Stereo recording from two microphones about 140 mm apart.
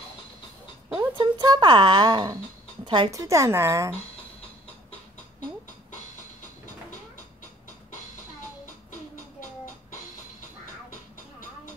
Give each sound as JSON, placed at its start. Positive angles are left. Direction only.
{"t": 1.1, "sound": "speech", "side_deg": -30}
{"t": 2.8, "sound": "a sound", "side_deg": -35}
{"t": 3.1, "sound": "speech", "side_deg": -20}
{"t": 8.6, "sound": "music", "side_deg": 65}